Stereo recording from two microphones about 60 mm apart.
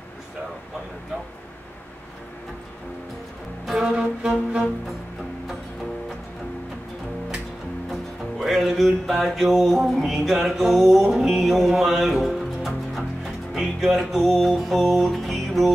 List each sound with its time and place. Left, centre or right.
3.8 s music: centre
7.9 s music: centre